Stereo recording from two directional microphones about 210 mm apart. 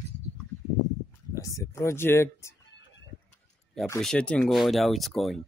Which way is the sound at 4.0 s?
5° left (ahead or behind).